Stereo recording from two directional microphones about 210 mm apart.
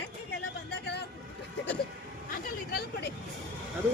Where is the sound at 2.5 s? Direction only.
45° left (ahead or behind).